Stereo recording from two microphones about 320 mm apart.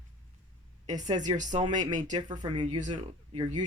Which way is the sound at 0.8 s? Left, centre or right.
Right.